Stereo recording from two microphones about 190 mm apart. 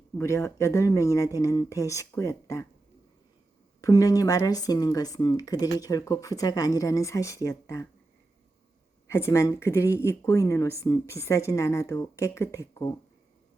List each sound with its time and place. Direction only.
0.2 s speech: 15° left (ahead or behind)
3.8 s speech: 20° left (ahead or behind)
9.0 s speech: 15° left (ahead or behind)